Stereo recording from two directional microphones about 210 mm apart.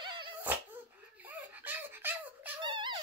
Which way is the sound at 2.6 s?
20° right (ahead or behind).